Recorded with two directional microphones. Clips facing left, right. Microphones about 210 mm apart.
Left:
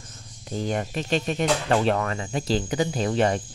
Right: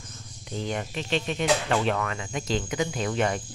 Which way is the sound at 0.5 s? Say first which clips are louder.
Left 4 dB; 40° left (ahead or behind).